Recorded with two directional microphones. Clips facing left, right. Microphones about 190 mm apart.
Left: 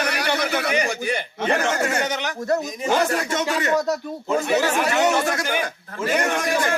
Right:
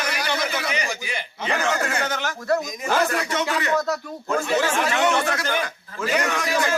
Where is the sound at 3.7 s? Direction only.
15° left (ahead or behind).